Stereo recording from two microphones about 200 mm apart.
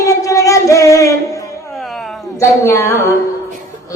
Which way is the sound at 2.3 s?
15° left (ahead or behind).